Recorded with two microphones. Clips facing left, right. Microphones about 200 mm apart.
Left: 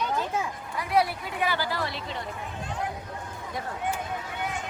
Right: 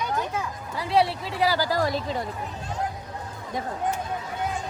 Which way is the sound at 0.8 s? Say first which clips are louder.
Right 3 dB; 30° right (ahead or behind).